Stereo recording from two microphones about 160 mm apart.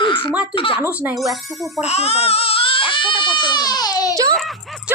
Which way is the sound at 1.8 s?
40° left (ahead or behind).